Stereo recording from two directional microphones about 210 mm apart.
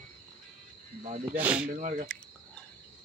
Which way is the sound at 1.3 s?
5° right (ahead or behind).